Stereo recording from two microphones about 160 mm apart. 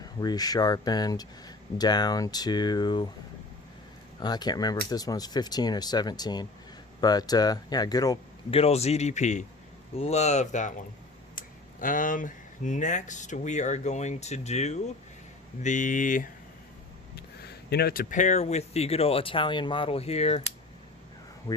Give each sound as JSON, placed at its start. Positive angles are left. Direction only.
{"t": 0.0, "sound": "speech", "side_deg": 25}
{"t": 4.2, "sound": "speech", "side_deg": 25}
{"t": 8.4, "sound": "a man's voice", "side_deg": 40}
{"t": 17.2, "sound": "speech", "side_deg": 85}